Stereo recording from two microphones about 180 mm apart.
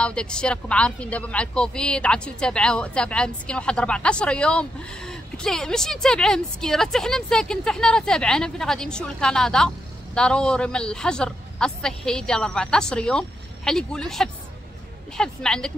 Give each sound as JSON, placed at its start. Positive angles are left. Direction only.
{"t": 0.0, "sound": "speech", "side_deg": 5}